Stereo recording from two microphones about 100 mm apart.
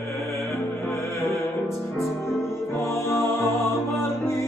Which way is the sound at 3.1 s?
30° left (ahead or behind).